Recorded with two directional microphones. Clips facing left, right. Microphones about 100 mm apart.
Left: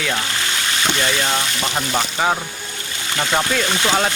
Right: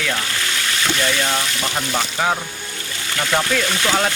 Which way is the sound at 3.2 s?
20° left (ahead or behind).